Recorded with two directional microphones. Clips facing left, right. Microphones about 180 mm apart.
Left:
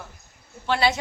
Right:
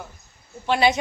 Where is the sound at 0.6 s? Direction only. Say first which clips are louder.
Right 3 dB; 15° right (ahead or behind).